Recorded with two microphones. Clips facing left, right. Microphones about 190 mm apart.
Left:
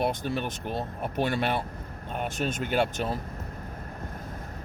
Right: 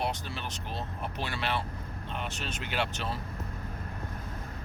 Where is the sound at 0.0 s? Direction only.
55° left (ahead or behind).